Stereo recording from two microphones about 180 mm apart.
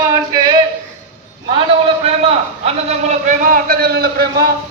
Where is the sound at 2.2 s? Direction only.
35° right (ahead or behind); by 4.5 s 60° right (ahead or behind).